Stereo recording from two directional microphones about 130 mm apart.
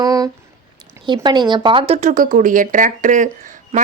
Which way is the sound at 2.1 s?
90° right.